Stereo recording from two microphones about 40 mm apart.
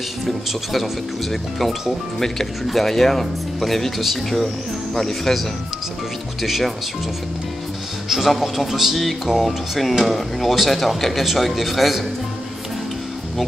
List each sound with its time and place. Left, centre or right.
1.3 s speech: centre
6.4 s speech: centre
8.1 s speech: centre